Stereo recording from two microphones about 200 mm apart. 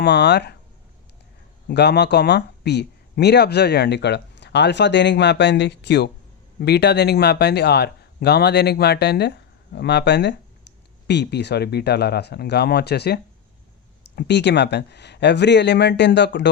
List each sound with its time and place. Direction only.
0.0 s speech: 55° left (ahead or behind)
1.6 s speech: 55° left (ahead or behind)
14.2 s speech: 60° left (ahead or behind)